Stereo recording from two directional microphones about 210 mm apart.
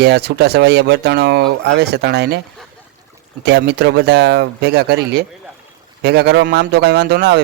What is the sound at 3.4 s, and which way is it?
Speech, 50° right (ahead or behind).